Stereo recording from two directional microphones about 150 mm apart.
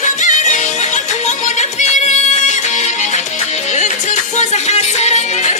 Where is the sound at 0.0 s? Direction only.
55° left (ahead or behind).